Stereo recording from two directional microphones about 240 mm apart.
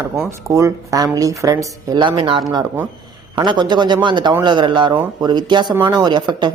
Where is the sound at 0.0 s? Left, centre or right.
Centre.